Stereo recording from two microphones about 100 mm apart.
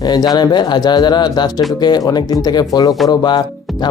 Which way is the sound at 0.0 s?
45° left (ahead or behind).